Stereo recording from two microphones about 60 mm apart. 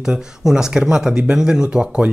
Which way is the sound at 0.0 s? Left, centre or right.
Centre.